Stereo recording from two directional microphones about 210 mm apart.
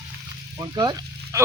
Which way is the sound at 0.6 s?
20° right (ahead or behind).